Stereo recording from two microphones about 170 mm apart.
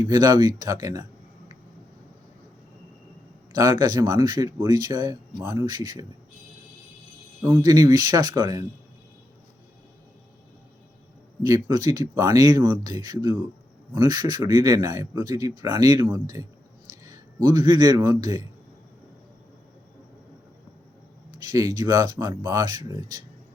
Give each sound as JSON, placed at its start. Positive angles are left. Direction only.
{"t": 0.1, "sound": "speech", "side_deg": -20}
{"t": 3.5, "sound": "speech", "side_deg": -20}
{"t": 7.4, "sound": "speech", "side_deg": -20}
{"t": 11.4, "sound": "a man's voice", "side_deg": -20}
{"t": 21.4, "sound": "speech", "side_deg": -20}